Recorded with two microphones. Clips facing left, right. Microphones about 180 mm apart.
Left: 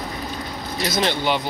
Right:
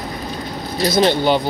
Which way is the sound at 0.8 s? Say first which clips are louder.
Right 7 dB; 35° right (ahead or behind).